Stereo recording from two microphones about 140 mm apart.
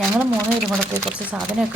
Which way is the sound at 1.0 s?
5° right (ahead or behind).